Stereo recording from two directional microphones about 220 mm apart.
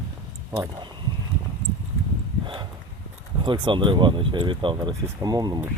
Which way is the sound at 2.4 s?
20° right (ahead or behind).